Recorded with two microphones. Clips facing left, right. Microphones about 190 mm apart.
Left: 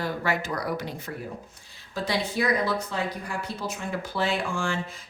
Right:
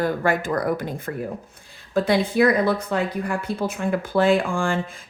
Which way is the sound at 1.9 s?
55° right (ahead or behind).